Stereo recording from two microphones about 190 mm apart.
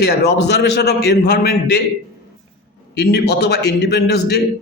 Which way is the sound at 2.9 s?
60° left (ahead or behind).